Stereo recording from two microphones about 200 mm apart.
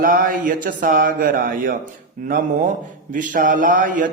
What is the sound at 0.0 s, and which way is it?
Mantra, 45° right (ahead or behind).